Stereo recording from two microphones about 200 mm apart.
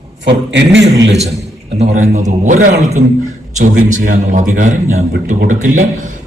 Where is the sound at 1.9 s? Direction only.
35° right (ahead or behind).